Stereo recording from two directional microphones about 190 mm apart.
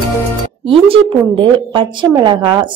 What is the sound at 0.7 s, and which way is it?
A woman's voice, 25° right (ahead or behind).